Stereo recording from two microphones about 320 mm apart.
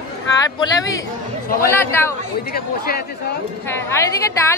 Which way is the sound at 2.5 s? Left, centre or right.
Left.